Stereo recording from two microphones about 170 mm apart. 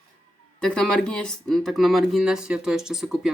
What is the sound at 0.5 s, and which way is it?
Speech, 5° left (ahead or behind).